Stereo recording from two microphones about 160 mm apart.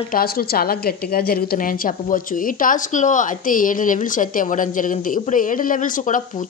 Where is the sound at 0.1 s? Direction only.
70° left (ahead or behind).